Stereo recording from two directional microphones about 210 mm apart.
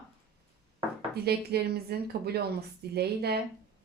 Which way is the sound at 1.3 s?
50° right (ahead or behind).